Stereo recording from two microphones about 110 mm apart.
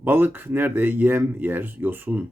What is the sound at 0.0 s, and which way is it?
Speech, 15° right (ahead or behind).